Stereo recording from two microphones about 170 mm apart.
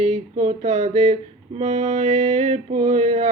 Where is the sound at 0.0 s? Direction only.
40° right (ahead or behind).